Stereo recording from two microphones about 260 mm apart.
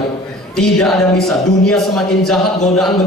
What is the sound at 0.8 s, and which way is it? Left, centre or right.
A man's voice, centre.